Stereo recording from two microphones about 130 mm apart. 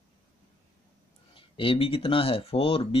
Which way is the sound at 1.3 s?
45° left (ahead or behind).